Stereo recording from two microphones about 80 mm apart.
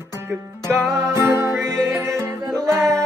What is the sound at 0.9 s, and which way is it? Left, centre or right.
Music, right.